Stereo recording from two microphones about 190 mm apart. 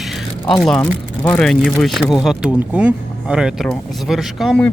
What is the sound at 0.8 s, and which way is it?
Speech, 15° left (ahead or behind).